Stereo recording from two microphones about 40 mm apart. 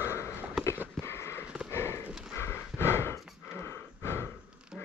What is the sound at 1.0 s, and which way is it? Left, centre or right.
Sniff, left.